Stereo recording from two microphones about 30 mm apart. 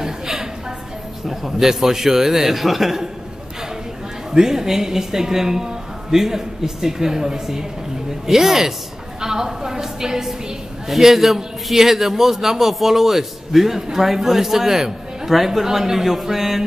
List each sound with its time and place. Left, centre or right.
0.0 s a sound: centre
1.2 s a woman's voice: centre
4.3 s a woman's voice: centre
8.3 s a woman's voice: centre